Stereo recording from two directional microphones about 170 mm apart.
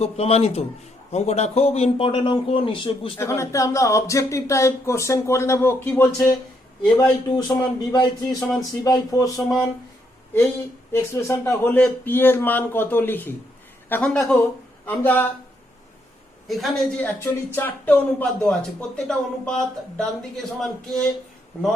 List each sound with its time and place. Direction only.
0.0 s a man's voice: 35° left (ahead or behind)
3.2 s speech: 15° left (ahead or behind)
7.3 s speech: 25° left (ahead or behind)
10.9 s speech: 15° left (ahead or behind)
16.5 s speech: centre (ahead or behind)
17.2 s speech: 10° left (ahead or behind)